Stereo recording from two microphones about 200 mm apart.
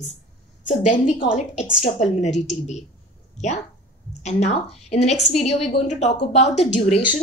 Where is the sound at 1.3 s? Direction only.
35° left (ahead or behind).